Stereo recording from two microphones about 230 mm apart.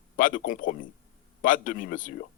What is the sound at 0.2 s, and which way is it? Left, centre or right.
Speech, left.